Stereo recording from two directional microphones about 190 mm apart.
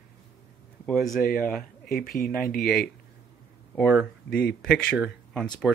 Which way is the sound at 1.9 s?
50° left (ahead or behind).